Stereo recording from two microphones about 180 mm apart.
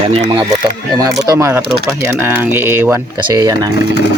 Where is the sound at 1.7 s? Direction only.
5° right (ahead or behind).